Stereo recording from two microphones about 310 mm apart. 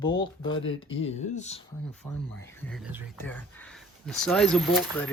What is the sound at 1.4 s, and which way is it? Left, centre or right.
Speech, left.